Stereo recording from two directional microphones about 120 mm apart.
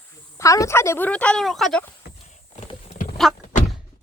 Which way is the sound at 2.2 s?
65° left (ahead or behind).